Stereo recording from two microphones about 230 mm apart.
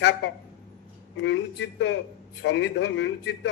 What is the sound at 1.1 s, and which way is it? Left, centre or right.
A woman's voice, left.